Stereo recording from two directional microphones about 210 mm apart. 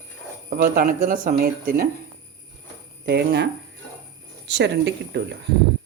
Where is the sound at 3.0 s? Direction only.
50° right (ahead or behind).